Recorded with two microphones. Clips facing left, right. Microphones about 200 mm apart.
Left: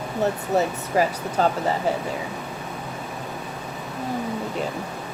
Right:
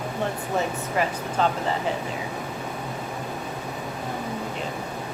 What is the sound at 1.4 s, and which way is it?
Speech, 40° left (ahead or behind).